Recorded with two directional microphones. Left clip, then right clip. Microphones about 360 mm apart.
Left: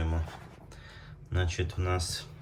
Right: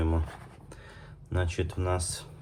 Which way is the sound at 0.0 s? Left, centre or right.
Centre.